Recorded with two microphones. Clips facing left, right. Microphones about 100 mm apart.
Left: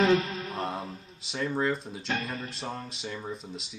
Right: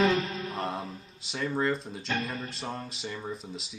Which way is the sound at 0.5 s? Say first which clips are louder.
Left 2 dB; centre (ahead or behind).